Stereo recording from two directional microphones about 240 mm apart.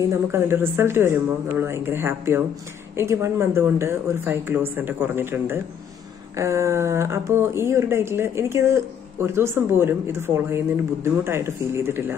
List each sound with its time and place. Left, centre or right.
0.1 s speech: centre